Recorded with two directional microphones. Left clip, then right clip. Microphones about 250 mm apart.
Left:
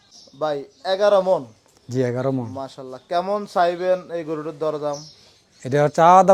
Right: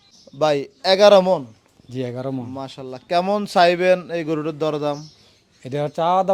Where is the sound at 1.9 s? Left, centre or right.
Left.